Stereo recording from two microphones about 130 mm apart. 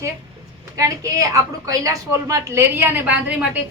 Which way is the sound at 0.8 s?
25° right (ahead or behind).